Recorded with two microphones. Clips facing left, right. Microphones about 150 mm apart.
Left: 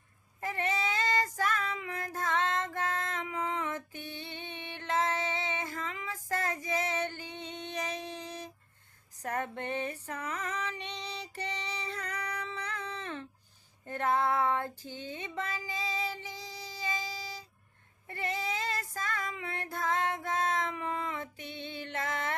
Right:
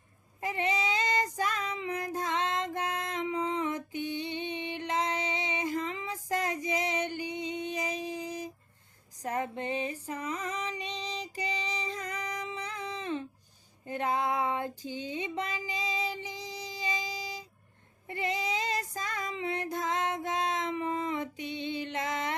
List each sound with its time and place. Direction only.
0.4 s female singing: 15° right (ahead or behind)
9.2 s music: 10° right (ahead or behind)
9.7 s female singing: 10° right (ahead or behind)
13.8 s music: 15° right (ahead or behind)
18.1 s female singing: 20° right (ahead or behind)